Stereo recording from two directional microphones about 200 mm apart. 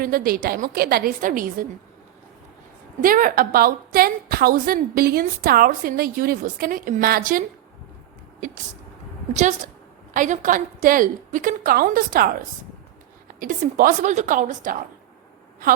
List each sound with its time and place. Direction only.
0.0 s a woman's voice: 45° right (ahead or behind)
3.0 s a woman's voice: 45° right (ahead or behind)
9.3 s a woman's voice: 35° right (ahead or behind)
13.4 s a woman's voice: 45° right (ahead or behind)